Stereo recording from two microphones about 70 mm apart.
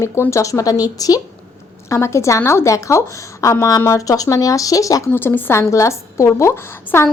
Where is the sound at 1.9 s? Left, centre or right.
Left.